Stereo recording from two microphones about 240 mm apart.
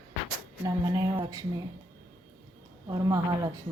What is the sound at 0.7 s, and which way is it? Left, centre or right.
Speech, centre.